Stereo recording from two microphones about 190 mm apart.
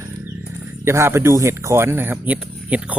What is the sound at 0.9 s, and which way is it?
Speech, 15° right (ahead or behind).